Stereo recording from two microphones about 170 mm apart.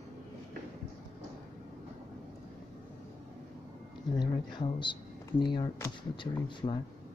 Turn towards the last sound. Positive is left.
turn(degrees=30)  # may be behind; listen again after turning